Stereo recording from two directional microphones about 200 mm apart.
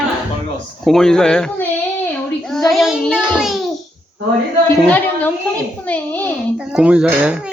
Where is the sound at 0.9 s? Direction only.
Centre (ahead or behind).